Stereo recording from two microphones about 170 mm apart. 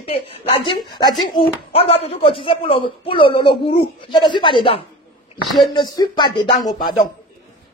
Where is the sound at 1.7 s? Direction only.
35° left (ahead or behind).